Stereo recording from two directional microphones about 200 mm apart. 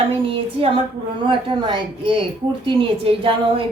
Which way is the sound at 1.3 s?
25° right (ahead or behind).